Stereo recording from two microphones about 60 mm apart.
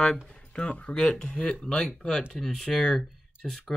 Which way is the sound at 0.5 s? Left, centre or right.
Centre.